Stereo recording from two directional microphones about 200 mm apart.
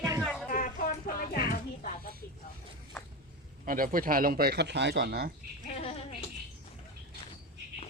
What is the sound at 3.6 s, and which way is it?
Speech, 45° right (ahead or behind).